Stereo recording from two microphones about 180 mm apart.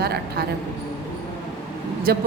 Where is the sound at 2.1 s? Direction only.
60° right (ahead or behind).